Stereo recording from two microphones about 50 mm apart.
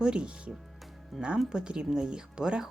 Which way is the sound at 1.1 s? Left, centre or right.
Centre.